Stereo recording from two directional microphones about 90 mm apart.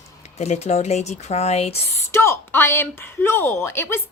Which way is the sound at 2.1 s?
30° left (ahead or behind).